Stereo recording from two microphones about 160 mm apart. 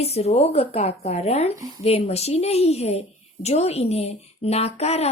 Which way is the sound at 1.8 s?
40° left (ahead or behind).